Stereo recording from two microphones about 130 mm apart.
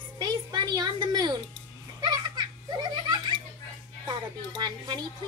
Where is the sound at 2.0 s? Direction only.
35° right (ahead or behind).